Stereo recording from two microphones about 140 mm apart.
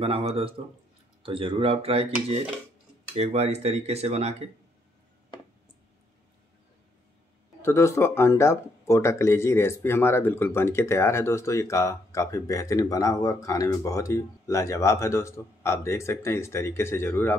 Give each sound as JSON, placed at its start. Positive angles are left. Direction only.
{"t": 0.0, "sound": "speech", "side_deg": -45}
{"t": 7.6, "sound": "speech", "side_deg": 20}